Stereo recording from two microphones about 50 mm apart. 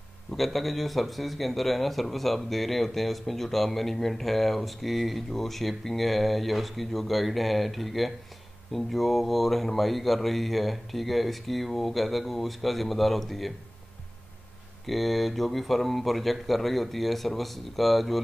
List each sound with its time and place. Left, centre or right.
0.4 s a man's voice: centre
14.9 s a man's voice: centre